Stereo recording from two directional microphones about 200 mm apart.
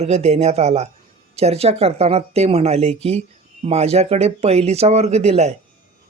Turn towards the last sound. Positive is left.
turn(degrees=-35)  # may be behind; listen again after turning